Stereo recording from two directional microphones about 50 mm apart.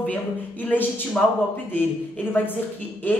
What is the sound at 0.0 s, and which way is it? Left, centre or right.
A woman's voice, left.